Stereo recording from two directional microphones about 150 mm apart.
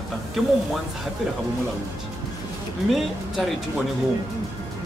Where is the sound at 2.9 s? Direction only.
Centre (ahead or behind).